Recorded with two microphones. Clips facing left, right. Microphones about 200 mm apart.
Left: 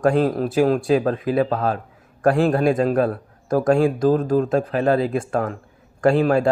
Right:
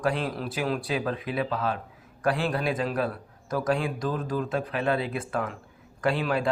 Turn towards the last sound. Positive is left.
turn(degrees=45)  # may be behind; listen again after turning